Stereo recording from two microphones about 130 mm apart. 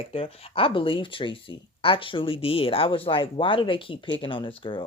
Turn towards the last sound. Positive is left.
turn(degrees=40)  # may be behind; listen again after turning